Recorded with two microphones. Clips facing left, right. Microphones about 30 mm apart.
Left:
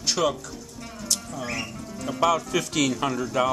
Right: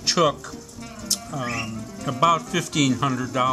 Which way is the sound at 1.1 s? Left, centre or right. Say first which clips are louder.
Right 2 dB; right.